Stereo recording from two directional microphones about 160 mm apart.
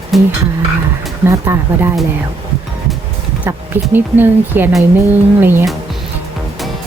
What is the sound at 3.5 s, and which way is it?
Speech, 15° right (ahead or behind).